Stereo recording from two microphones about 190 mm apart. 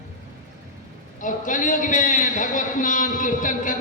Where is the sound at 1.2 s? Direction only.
45° left (ahead or behind).